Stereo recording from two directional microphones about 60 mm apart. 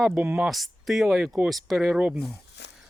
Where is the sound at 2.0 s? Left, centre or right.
Right.